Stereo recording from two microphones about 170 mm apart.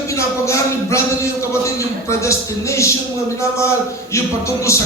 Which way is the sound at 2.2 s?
15° left (ahead or behind).